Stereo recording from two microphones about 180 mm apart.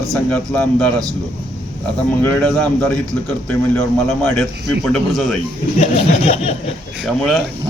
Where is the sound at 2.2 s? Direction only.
10° left (ahead or behind).